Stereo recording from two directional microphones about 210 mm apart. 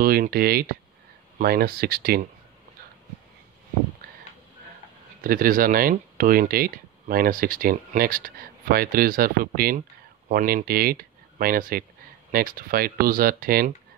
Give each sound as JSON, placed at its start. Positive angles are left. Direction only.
{"t": 0.0, "sound": "speech", "side_deg": -45}
{"t": 4.0, "sound": "a sound", "side_deg": -45}
{"t": 5.2, "sound": "speech", "side_deg": -40}